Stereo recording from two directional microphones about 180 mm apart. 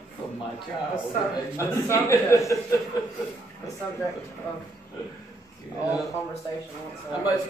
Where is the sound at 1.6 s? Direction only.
15° left (ahead or behind).